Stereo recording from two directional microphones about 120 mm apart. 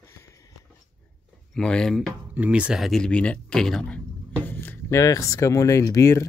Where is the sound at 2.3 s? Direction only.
10° right (ahead or behind).